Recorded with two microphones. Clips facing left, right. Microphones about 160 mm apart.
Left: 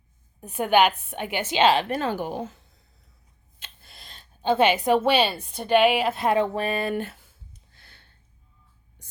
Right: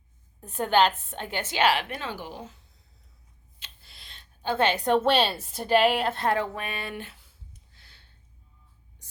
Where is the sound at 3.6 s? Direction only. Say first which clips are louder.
Left 5 dB; 50° left (ahead or behind).